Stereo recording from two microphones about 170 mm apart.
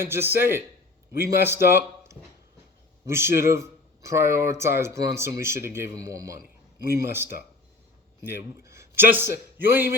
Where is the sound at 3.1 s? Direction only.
15° right (ahead or behind).